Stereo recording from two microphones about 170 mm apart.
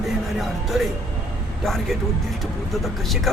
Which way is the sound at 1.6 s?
Centre (ahead or behind).